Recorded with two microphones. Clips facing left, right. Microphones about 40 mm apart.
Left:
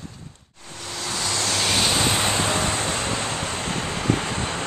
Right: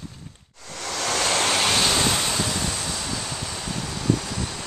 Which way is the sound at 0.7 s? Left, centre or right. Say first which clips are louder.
Right 4 dB; right.